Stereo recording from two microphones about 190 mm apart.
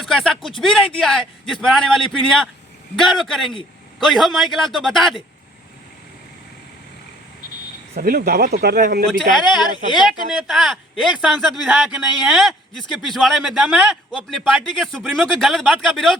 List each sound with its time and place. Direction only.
0.0 s speech: centre (ahead or behind)
7.9 s speech: 50° right (ahead or behind)
9.9 s speech: centre (ahead or behind)